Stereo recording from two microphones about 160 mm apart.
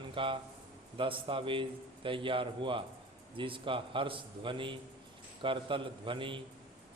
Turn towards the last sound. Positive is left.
turn(degrees=-30)  # may be behind; listen again after turning